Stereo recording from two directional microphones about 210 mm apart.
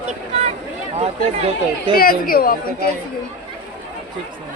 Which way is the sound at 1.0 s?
30° right (ahead or behind).